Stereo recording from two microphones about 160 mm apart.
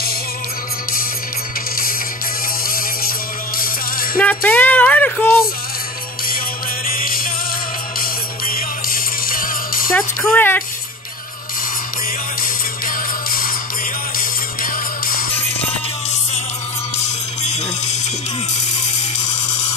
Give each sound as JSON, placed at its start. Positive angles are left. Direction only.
{"t": 2.7, "sound": "music", "side_deg": 65}
{"t": 4.2, "sound": "music", "side_deg": 10}
{"t": 6.9, "sound": "music", "side_deg": 60}
{"t": 9.9, "sound": "speech", "side_deg": 10}
{"t": 12.8, "sound": "music", "side_deg": 65}
{"t": 14.6, "sound": "music", "side_deg": 65}
{"t": 17.0, "sound": "music", "side_deg": 45}